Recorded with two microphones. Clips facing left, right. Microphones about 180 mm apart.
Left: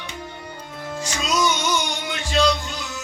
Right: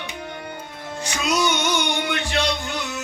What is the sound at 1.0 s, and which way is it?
Music, 65° right (ahead or behind).